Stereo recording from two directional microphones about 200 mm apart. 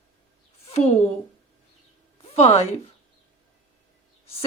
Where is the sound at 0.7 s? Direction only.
35° left (ahead or behind).